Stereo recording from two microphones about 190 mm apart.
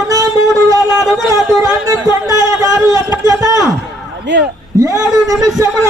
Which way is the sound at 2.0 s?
20° right (ahead or behind).